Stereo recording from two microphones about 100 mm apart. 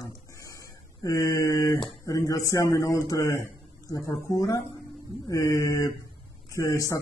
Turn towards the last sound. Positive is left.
turn(degrees=30)  # may be behind; listen again after turning